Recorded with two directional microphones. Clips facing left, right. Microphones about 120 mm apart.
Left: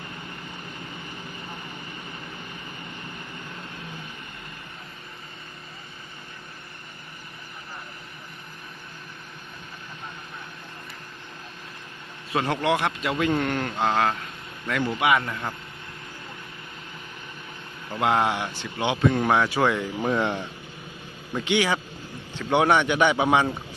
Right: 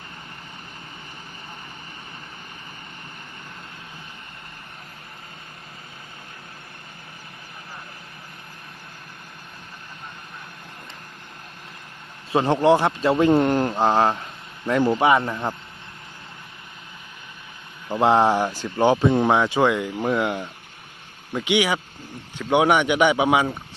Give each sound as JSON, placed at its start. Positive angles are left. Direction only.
{"t": 12.3, "sound": "a man's voice", "side_deg": -30}
{"t": 17.9, "sound": "a man's voice", "side_deg": -30}
{"t": 19.0, "sound": "a man's voice", "side_deg": -25}